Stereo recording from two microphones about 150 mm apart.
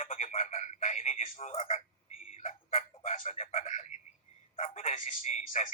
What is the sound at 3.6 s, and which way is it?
Telephone, 55° left (ahead or behind).